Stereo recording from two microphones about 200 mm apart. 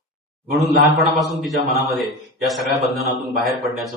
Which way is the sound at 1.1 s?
Centre (ahead or behind).